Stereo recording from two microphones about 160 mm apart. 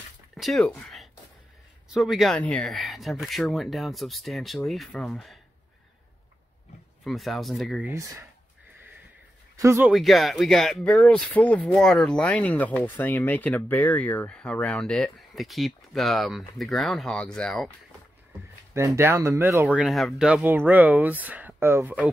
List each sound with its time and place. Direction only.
0.4 s speech: centre (ahead or behind)
7.1 s speech: centre (ahead or behind)
7.8 s speech: 15° right (ahead or behind)
9.6 s speech: 15° right (ahead or behind)
9.8 s speech: centre (ahead or behind)
18.9 s speech: 15° right (ahead or behind)
19.7 s speech: centre (ahead or behind)